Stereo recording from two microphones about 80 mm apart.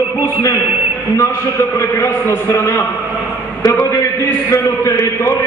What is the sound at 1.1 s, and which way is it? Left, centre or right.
A man's voice, left.